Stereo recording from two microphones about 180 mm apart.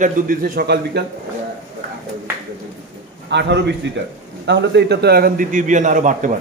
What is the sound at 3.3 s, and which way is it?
A man's voice, 70° right (ahead or behind).